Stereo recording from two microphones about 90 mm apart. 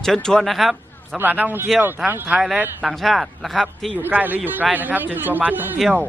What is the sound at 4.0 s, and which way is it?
A man's voice, 20° right (ahead or behind).